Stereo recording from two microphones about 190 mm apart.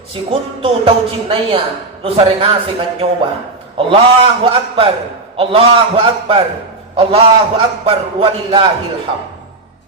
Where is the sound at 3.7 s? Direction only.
30° right (ahead or behind).